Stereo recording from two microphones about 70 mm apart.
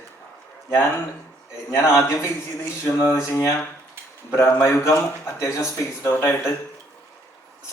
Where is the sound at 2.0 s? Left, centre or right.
Left.